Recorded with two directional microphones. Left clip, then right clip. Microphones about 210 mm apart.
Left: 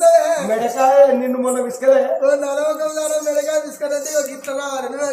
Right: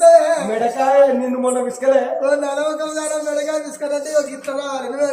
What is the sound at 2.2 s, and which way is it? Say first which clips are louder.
Speech: left 1 dB; 5° right (ahead or behind).